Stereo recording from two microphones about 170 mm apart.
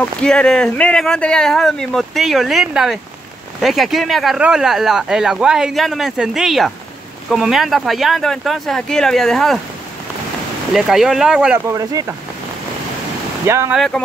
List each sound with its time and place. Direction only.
0.0 s speech: 5° left (ahead or behind)
10.7 s speech: 5° right (ahead or behind)
11.6 s speech: 20° right (ahead or behind)
13.5 s speech: 15° right (ahead or behind)
13.7 s speech: 5° left (ahead or behind)